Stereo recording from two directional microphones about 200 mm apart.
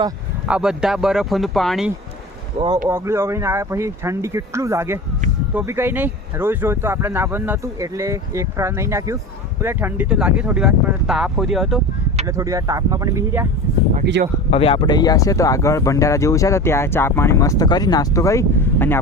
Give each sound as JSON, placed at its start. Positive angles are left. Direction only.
{"t": 0.4, "sound": "speech", "side_deg": -5}
{"t": 2.6, "sound": "speech", "side_deg": -20}
{"t": 12.4, "sound": "speech", "side_deg": -15}
{"t": 14.0, "sound": "speech", "side_deg": -55}
{"t": 14.5, "sound": "speech", "side_deg": 25}